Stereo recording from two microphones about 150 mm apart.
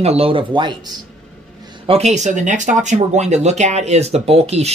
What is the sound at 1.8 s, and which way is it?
Speech, 45° right (ahead or behind).